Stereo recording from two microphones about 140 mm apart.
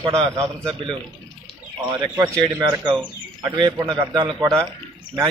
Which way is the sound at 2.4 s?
35° right (ahead or behind).